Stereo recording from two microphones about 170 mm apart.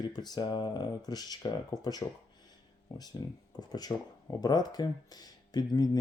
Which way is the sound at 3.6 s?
25° left (ahead or behind).